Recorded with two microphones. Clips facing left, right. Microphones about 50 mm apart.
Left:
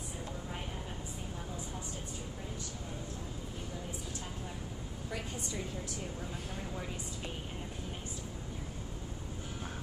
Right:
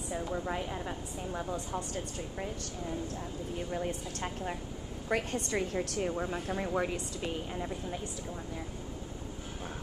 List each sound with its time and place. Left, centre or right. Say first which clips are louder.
3.7 s a woman's voice: right 7 dB; right